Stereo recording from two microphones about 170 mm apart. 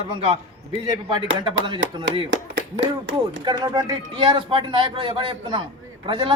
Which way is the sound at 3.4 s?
25° right (ahead or behind).